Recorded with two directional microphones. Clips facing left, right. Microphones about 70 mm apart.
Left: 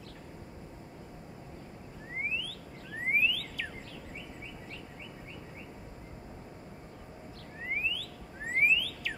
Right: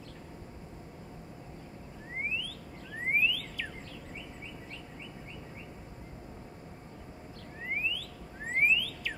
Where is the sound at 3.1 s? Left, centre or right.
Centre.